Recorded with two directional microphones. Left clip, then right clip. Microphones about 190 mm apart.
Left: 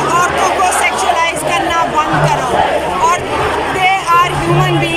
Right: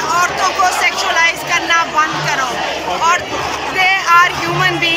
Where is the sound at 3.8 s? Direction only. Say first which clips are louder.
Right 1 dB; 15° left (ahead or behind).